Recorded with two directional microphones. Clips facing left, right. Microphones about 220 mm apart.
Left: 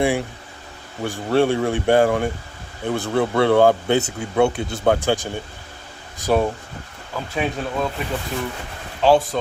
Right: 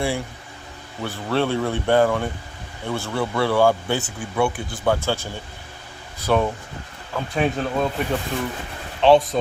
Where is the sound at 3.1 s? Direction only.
55° left (ahead or behind).